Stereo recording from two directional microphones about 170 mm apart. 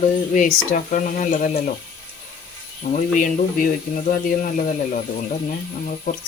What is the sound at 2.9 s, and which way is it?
Speech, 50° left (ahead or behind).